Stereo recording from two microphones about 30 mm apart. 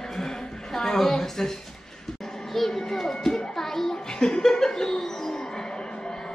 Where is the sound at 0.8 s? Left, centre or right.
Centre.